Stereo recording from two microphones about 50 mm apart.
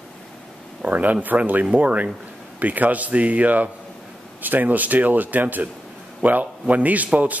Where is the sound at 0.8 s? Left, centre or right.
Right.